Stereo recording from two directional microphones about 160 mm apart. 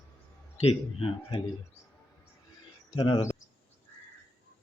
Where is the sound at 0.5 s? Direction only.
30° left (ahead or behind).